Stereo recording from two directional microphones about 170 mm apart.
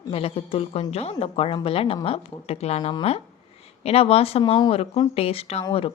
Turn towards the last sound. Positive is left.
turn(degrees=30)  # may be behind; listen again after turning